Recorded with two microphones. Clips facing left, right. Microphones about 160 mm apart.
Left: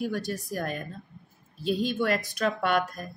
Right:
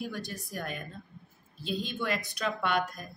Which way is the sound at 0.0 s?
45° left (ahead or behind).